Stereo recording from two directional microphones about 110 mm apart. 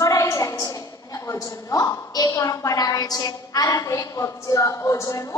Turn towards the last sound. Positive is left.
turn(degrees=30)  # may be behind; listen again after turning